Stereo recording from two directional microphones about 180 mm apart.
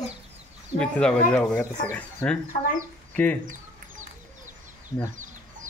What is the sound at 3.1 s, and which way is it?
Bird, 10° left (ahead or behind).